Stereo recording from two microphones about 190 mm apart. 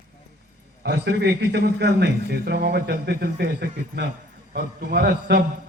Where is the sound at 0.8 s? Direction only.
60° right (ahead or behind).